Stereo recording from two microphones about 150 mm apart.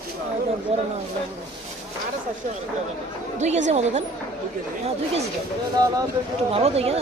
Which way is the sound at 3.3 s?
50° right (ahead or behind).